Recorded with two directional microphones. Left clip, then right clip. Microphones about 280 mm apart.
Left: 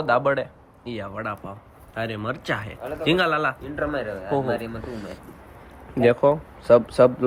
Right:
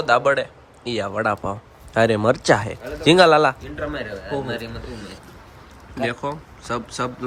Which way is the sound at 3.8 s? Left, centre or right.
Centre.